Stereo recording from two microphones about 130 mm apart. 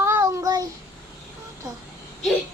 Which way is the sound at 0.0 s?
25° right (ahead or behind).